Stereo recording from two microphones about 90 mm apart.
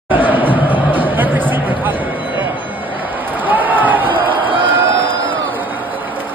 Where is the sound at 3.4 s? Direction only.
20° right (ahead or behind).